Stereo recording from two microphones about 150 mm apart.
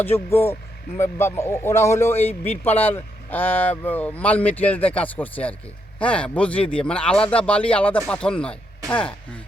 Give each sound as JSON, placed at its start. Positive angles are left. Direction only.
{"t": 0.0, "sound": "a man's voice", "side_deg": 15}